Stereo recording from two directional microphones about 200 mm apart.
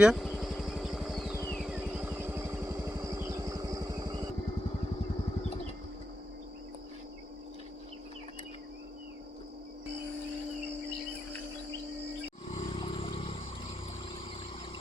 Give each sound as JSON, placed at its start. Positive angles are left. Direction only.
{"t": 0.0, "sound": "vehicle", "side_deg": 0}
{"t": 12.5, "sound": "vehicle", "side_deg": 25}